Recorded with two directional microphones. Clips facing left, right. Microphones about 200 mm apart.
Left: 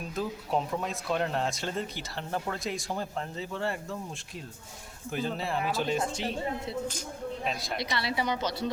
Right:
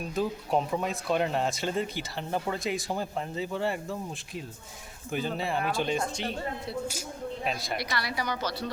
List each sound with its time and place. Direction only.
0.1 s speech: centre (ahead or behind)
5.1 s speech: centre (ahead or behind)
7.4 s speech: centre (ahead or behind)
7.8 s a woman's voice: 25° left (ahead or behind)